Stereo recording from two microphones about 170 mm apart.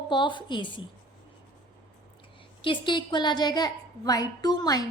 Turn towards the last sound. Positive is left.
turn(degrees=20)  # may be behind; listen again after turning